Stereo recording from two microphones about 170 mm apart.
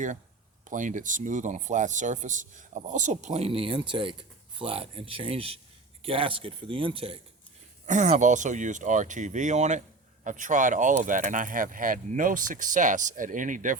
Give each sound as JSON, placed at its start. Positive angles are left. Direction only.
{"t": 0.6, "sound": "speech", "side_deg": -50}
{"t": 7.9, "sound": "speech", "side_deg": -45}